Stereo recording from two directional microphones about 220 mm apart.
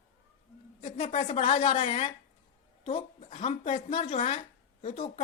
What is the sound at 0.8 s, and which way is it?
A woman's voice, 25° left (ahead or behind).